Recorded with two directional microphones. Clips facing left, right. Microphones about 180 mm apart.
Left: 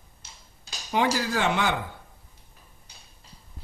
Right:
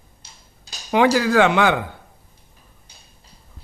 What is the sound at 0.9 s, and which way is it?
Speech, 85° right.